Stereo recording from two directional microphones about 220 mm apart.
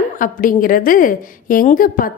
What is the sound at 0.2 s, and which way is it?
A woman's voice, 40° left (ahead or behind).